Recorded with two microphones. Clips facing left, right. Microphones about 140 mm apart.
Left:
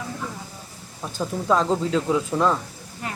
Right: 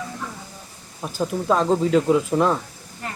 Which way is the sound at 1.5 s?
5° right (ahead or behind).